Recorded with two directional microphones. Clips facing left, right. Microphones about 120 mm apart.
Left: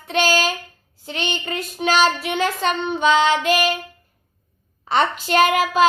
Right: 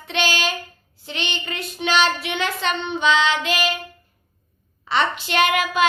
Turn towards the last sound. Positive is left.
turn(degrees=35)  # may be behind; listen again after turning